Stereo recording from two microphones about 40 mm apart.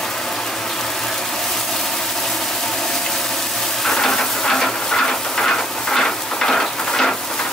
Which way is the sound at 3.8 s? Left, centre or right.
Centre.